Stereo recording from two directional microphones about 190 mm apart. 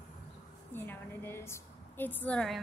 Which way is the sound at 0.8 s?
10° left (ahead or behind).